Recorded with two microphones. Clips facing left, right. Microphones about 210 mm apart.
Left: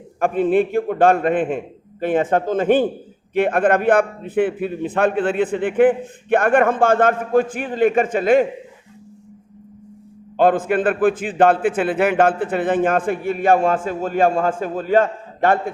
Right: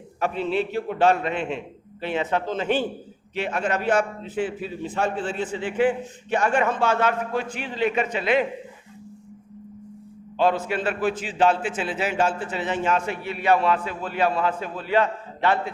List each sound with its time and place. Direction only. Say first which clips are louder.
0.2 s a man's voice: left 8 dB; 50° left (ahead or behind)
10.3 s a man's voice: left 6 dB; 50° left (ahead or behind)